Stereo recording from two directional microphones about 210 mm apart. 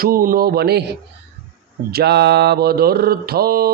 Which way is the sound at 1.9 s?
50° right (ahead or behind).